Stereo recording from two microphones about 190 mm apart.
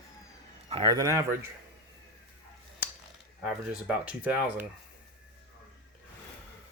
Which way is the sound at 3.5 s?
5° right (ahead or behind).